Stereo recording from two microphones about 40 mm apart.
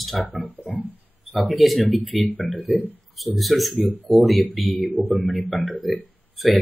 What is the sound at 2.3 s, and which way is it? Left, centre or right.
Speech, left.